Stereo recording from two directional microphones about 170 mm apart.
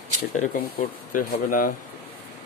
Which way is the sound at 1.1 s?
50° left (ahead or behind).